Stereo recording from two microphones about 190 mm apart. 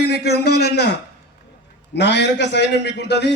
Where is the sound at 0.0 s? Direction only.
60° left (ahead or behind).